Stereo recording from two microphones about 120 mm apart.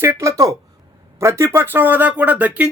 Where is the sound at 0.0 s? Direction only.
25° right (ahead or behind).